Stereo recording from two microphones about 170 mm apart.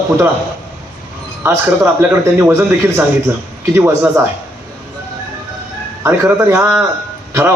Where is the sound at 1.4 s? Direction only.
15° right (ahead or behind).